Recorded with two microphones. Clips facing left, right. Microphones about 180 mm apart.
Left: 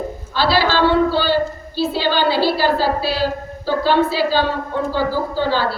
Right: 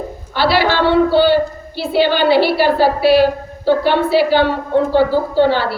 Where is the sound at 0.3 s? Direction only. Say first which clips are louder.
Right 2 dB; 60° right (ahead or behind).